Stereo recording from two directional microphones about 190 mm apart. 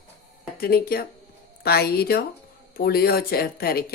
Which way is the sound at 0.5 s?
50° left (ahead or behind).